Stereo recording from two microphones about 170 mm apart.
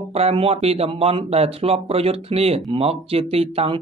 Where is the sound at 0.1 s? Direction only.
35° right (ahead or behind).